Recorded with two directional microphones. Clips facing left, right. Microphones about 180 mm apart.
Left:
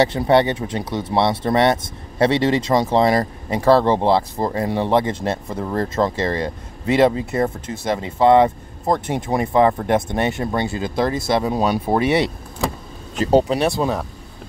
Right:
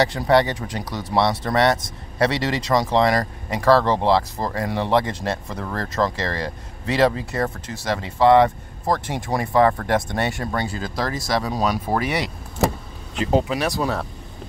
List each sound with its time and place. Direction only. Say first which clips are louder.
0.0 s speech: left 2 dB; 25° left (ahead or behind)
13.1 s speech: left 5 dB; 35° left (ahead or behind)